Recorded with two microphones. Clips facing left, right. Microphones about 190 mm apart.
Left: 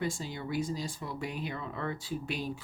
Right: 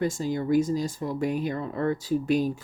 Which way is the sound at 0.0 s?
45° right (ahead or behind).